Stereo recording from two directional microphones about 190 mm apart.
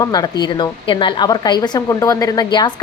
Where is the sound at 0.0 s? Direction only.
20° left (ahead or behind).